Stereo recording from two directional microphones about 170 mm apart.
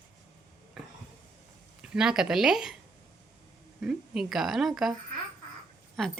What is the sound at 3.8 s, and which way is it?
A woman's voice, 5° right (ahead or behind).